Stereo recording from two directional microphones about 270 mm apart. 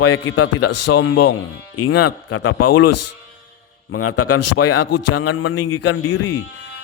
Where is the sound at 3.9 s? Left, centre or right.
Left.